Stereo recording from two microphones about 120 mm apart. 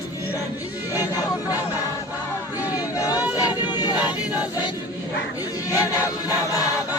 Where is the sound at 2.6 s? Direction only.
15° right (ahead or behind).